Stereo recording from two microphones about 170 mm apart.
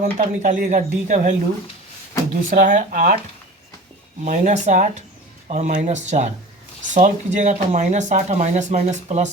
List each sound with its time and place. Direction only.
0.0 s speech: 50° right (ahead or behind)
2.5 s speech: 50° right (ahead or behind)
4.2 s speech: 45° right (ahead or behind)